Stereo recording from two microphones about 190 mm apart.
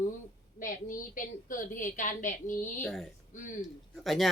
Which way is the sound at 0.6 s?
45° left (ahead or behind).